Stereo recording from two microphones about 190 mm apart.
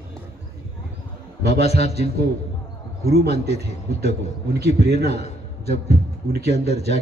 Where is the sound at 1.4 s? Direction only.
35° left (ahead or behind).